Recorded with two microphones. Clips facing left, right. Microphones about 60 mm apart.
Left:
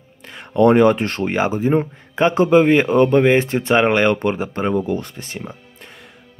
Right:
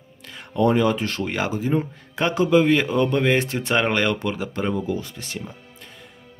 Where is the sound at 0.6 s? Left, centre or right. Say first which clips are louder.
Left 7 dB; left.